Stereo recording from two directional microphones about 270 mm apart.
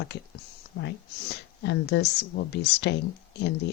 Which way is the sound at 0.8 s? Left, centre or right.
Left.